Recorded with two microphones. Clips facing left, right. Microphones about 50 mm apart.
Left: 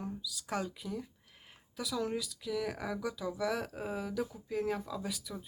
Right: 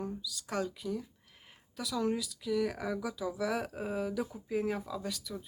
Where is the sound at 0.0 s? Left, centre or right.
Centre.